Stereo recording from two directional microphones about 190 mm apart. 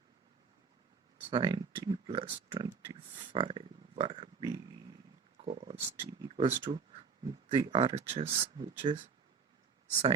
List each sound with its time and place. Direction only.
1.3 s speech: 25° right (ahead or behind)
5.4 s a sound: 30° right (ahead or behind)
6.0 s speech: 25° right (ahead or behind)